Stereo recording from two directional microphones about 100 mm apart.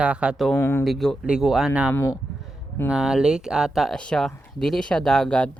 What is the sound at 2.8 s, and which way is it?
Speech, 5° right (ahead or behind).